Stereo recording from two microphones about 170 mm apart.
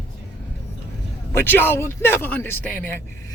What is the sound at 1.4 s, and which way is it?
A man's voice, 10° left (ahead or behind).